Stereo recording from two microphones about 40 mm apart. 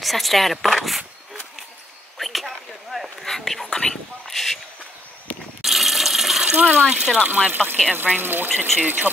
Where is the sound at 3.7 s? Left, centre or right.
Centre.